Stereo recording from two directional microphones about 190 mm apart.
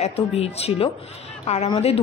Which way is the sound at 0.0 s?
35° left (ahead or behind).